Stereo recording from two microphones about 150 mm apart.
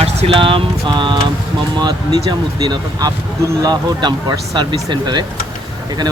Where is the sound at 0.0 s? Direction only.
40° right (ahead or behind).